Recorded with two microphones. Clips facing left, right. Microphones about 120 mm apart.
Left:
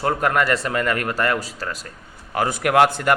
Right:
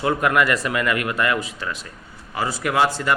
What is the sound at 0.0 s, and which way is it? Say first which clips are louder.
Speech: right 1 dB; 40° left (ahead or behind).